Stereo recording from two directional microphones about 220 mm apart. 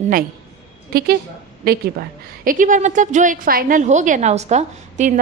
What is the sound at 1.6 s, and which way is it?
A woman's voice, 45° right (ahead or behind).